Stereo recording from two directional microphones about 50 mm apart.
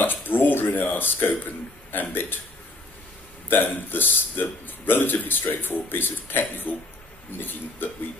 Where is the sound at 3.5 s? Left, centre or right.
Left.